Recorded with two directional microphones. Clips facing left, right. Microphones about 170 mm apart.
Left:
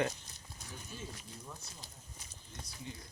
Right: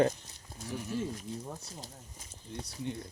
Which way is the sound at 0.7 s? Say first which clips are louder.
Right 14 dB; 75° right (ahead or behind).